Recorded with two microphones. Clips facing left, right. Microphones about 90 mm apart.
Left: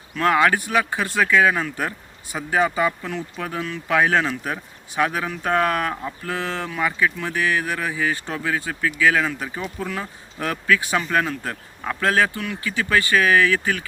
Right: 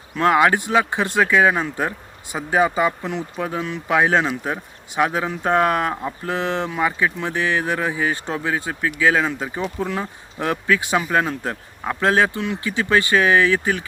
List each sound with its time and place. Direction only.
0.1 s speech: 20° right (ahead or behind)